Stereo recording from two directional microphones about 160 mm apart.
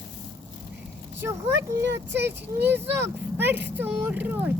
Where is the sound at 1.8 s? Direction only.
90° right.